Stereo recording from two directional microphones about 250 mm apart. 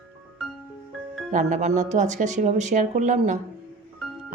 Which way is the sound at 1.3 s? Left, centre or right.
Right.